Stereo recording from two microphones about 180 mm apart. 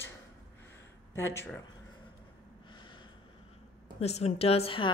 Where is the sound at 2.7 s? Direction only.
25° left (ahead or behind).